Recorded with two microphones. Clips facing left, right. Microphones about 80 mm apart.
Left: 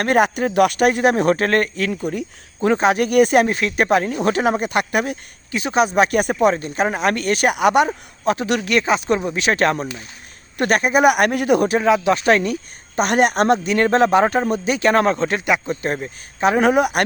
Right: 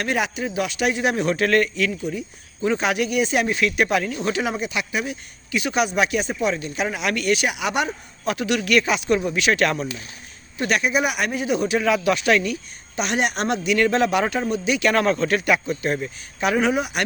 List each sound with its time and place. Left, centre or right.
0.0 s speech: left
1.9 s speech: left
2.7 s speech: left
3.1 s speech: left
5.5 s speech: left
10.6 s speech: left
11.8 s speech: left
16.6 s speech: left